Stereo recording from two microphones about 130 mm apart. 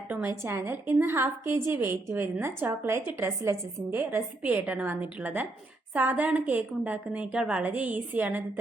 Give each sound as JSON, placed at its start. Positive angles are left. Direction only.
{"t": 0.4, "sound": "a woman's voice", "side_deg": -20}